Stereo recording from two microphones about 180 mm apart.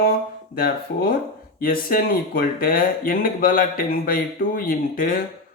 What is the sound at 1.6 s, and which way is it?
Speech, 50° left (ahead or behind).